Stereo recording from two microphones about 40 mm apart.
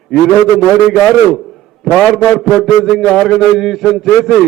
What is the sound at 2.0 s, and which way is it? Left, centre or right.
A man's voice, centre.